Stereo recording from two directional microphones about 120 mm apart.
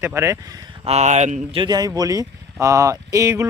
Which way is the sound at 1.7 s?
35° right (ahead or behind).